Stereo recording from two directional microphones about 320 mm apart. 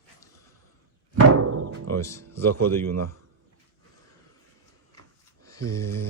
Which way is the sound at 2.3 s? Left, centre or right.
Right.